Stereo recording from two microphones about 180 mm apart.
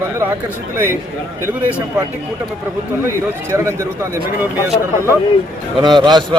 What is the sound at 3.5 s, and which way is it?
Speech, 15° right (ahead or behind).